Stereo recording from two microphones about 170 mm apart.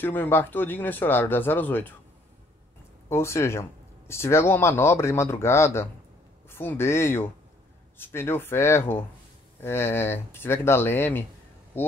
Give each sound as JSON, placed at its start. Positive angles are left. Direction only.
{"t": 0.0, "sound": "speech", "side_deg": 10}
{"t": 3.1, "sound": "speech", "side_deg": 15}